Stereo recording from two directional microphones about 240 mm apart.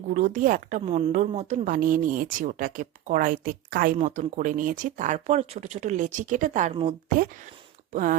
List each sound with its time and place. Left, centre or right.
0.1 s a woman's voice: right